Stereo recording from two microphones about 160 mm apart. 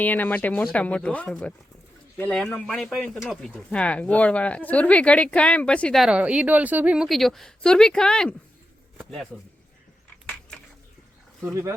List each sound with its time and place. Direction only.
0.0 s speech: 10° left (ahead or behind)
11.4 s speech: 20° right (ahead or behind)